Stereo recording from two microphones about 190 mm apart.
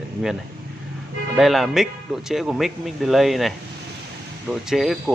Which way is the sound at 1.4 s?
Centre (ahead or behind).